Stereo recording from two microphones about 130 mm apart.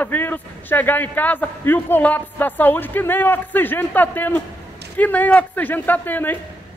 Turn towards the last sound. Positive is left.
turn(degrees=15)  # may be behind; listen again after turning